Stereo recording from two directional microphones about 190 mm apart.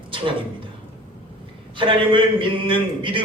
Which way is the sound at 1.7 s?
25° right (ahead or behind).